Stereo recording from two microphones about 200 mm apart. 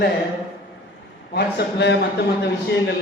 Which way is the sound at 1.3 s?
55° left (ahead or behind).